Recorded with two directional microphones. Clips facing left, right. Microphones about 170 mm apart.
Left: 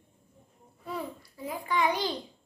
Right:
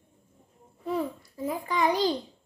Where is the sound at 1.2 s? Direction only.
45° right (ahead or behind).